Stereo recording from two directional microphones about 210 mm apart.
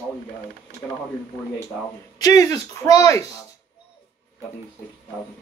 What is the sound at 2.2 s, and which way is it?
Speech, 15° left (ahead or behind).